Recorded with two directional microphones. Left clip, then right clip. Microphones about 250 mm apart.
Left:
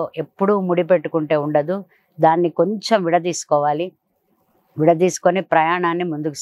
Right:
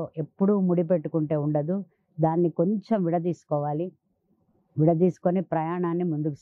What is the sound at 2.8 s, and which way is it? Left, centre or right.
Speech, centre.